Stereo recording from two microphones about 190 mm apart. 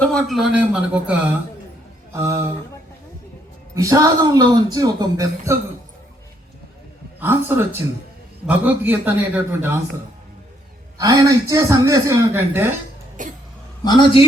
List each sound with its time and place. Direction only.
0.0 s a man's voice: 5° left (ahead or behind)
2.1 s a sound: 15° right (ahead or behind)
3.8 s speech: 15° right (ahead or behind)
7.2 s speech: 10° right (ahead or behind)
10.9 s speech: 15° right (ahead or behind)
13.2 s cough: 45° right (ahead or behind)
13.8 s a man's voice: 25° left (ahead or behind)